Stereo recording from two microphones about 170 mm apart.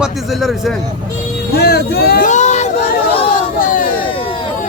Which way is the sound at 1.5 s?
65° left (ahead or behind).